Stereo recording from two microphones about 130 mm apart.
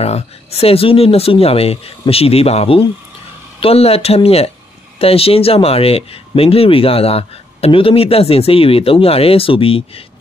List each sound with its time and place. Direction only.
0.0 s speech: 50° left (ahead or behind)